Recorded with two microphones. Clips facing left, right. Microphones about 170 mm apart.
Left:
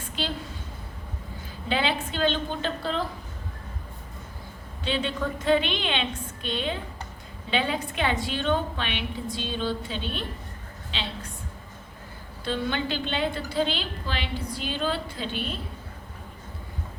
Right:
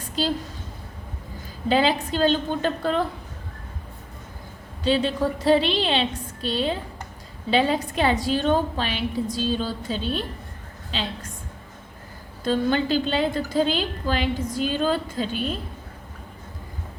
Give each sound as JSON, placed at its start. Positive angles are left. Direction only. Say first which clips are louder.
{"t": 0.0, "sound": "a sound", "louder": "right 7 dB", "side_deg": -40}
{"t": 1.6, "sound": "a woman's voice", "louder": "right 6 dB", "side_deg": -40}
{"t": 4.8, "sound": "a woman's voice", "louder": "right 6 dB", "side_deg": -40}
{"t": 12.5, "sound": "a woman's voice", "louder": "right 7 dB", "side_deg": -40}